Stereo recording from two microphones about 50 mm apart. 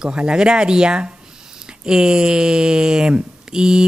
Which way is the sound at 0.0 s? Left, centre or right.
Centre.